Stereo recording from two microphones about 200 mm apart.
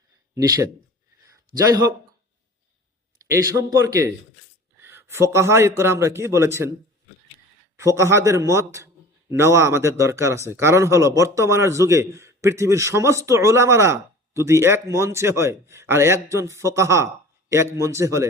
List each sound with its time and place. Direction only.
0.3 s speech: 20° right (ahead or behind)
3.2 s speech: 15° right (ahead or behind)
7.8 s speech: 15° right (ahead or behind)